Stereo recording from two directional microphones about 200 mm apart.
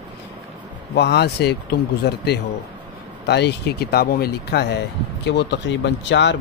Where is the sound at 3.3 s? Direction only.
60° left (ahead or behind).